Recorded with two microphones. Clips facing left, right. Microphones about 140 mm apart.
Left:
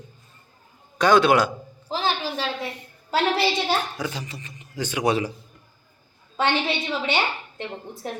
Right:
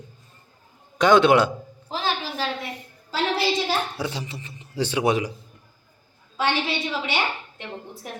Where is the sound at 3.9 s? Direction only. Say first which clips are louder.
Right 1 dB; 30° right (ahead or behind).